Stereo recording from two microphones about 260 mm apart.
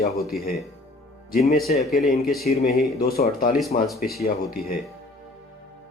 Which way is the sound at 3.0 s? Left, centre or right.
Left.